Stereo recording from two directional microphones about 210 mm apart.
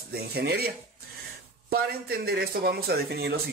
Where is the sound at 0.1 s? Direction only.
50° right (ahead or behind).